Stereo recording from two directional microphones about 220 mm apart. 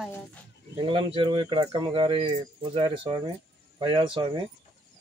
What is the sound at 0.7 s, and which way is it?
Speech, 25° right (ahead or behind).